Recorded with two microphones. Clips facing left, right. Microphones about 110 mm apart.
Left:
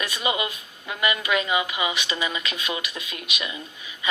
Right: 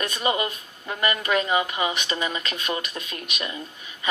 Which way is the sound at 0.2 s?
10° left (ahead or behind).